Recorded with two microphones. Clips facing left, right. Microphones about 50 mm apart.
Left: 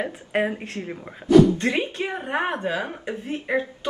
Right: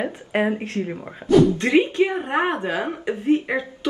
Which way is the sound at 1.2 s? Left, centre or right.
Right.